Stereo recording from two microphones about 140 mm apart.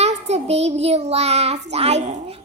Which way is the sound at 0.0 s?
50° right (ahead or behind).